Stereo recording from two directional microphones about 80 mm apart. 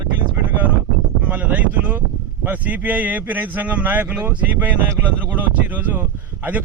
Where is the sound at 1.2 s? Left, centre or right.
Centre.